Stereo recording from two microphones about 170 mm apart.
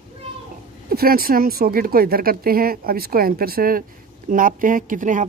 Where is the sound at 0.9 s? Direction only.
60° right (ahead or behind).